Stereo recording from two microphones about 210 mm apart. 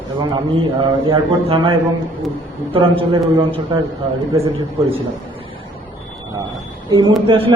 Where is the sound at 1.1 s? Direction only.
25° right (ahead or behind).